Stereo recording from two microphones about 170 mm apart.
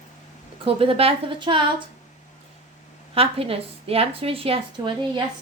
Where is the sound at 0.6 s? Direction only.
35° right (ahead or behind).